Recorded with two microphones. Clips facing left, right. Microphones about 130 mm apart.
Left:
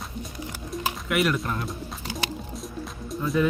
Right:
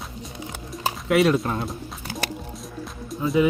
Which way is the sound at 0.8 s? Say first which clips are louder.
Right 6 dB; 30° right (ahead or behind).